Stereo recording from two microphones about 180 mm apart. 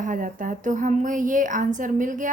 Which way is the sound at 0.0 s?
45° right (ahead or behind).